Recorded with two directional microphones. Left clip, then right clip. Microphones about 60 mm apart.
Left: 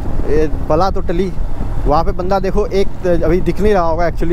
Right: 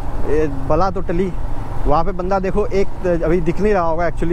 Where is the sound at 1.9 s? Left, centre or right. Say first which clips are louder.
Left 3 dB; left.